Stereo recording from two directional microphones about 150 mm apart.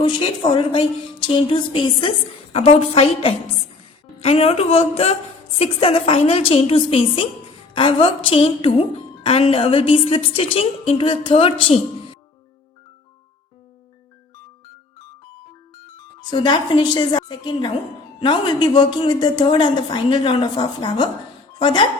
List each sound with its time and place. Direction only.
0.0 s a woman's voice: 35° left (ahead or behind)
16.3 s a woman's voice: 30° left (ahead or behind)